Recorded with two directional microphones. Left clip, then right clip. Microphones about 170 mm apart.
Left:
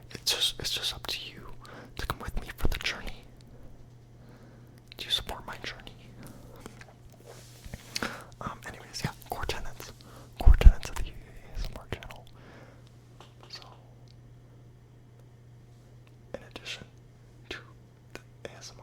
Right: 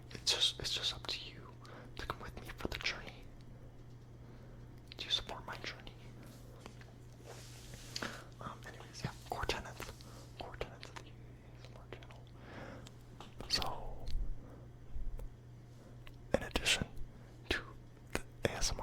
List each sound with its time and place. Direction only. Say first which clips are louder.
0.1 s whispering: left 5 dB; 20° left (ahead or behind)
4.9 s whispering: left 6 dB; 20° left (ahead or behind)
7.9 s whispering: left 9 dB; 35° left (ahead or behind)
9.3 s whispering: left 2 dB; 10° left (ahead or behind)
10.3 s whispering: left 12 dB; 30° left (ahead or behind)
13.5 s whispering: right 10 dB; 45° right (ahead or behind)
16.3 s whispering: right 7 dB; 30° right (ahead or behind)
17.5 s whispering: right 3 dB; 20° right (ahead or behind)